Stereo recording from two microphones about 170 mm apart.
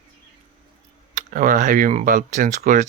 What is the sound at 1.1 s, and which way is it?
Speech, 50° right (ahead or behind).